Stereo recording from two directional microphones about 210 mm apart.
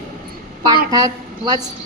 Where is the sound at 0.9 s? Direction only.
20° right (ahead or behind).